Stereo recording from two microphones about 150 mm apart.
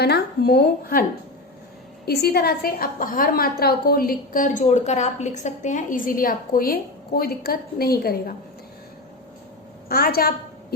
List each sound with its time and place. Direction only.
0.0 s a woman's voice: 90° left
2.0 s a woman's voice: 90° left
9.9 s a woman's voice: 90° left